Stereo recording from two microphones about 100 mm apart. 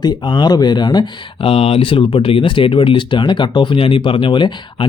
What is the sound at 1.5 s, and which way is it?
Speech, 80° left.